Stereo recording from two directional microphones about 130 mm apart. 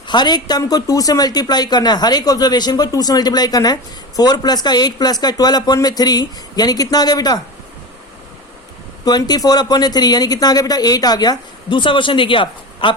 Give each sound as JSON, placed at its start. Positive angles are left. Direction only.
{"t": 0.1, "sound": "speech", "side_deg": 35}
{"t": 9.0, "sound": "speech", "side_deg": 30}